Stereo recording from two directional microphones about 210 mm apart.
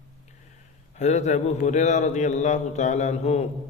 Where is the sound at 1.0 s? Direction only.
35° left (ahead or behind).